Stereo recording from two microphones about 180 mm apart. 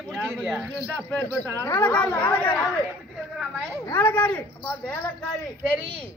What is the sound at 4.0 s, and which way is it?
Speech, 10° left (ahead or behind).